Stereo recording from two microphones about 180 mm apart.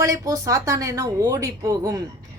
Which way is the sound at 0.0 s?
15° right (ahead or behind).